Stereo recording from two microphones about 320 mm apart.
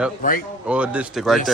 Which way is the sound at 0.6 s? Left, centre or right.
Centre.